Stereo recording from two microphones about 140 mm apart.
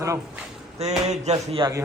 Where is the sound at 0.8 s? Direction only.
50° right (ahead or behind).